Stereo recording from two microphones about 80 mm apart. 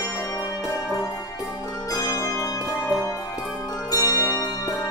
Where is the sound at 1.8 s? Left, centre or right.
Left.